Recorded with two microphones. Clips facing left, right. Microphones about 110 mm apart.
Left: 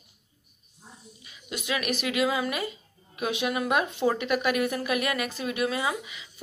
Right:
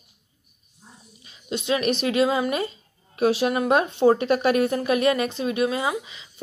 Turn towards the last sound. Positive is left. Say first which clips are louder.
# right 3 dB
turn(degrees=-30)  # may be behind; listen again after turning